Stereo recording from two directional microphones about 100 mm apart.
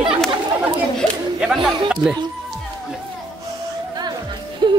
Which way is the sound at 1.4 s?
5° right (ahead or behind).